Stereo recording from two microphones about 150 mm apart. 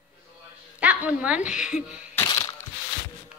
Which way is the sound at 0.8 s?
10° right (ahead or behind).